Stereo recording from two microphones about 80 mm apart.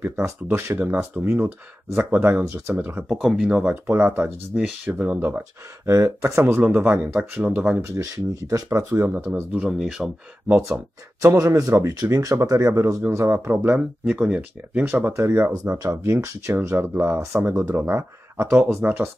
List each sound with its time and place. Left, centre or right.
0.0 s speech: right
2.4 s speech: right
2.8 s speech: right
3.1 s speech: centre
3.7 s speech: right
5.9 s speech: right
6.4 s speech: centre
7.9 s speech: right
9.0 s speech: right
9.3 s speech: centre
10.7 s speech: right
15.7 s speech: right